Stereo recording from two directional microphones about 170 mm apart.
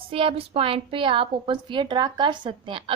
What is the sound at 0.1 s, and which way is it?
A woman's voice, 30° right (ahead or behind).